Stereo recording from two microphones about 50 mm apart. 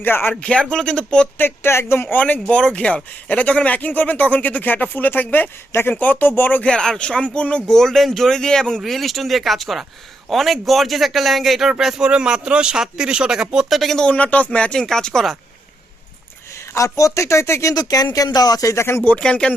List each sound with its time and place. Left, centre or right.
0.0 s speech: left
0.3 s speech: left
1.4 s speech: left
2.1 s speech: left
2.6 s speech: left
6.6 s speech: centre
7.7 s speech: centre
8.8 s a man's voice: centre
11.9 s speech: centre
13.7 s a man's voice: centre
14.1 s speech: left
14.8 s speech: centre
16.6 s speech: left
19.1 s speech: centre